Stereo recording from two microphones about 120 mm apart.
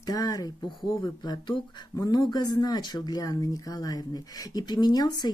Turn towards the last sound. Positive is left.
turn(degrees=35)  # may be behind; listen again after turning